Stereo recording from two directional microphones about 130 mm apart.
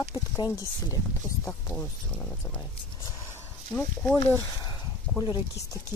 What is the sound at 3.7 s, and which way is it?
Speech, 10° left (ahead or behind).